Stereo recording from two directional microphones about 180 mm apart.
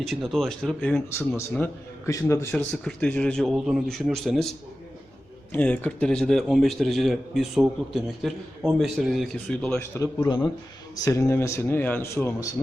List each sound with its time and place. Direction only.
0.0 s a man's voice: centre (ahead or behind)
5.5 s a man's voice: 10° left (ahead or behind)
9.9 s a man's voice: 20° left (ahead or behind)